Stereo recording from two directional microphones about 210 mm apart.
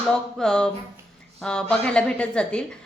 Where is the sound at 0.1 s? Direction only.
5° left (ahead or behind).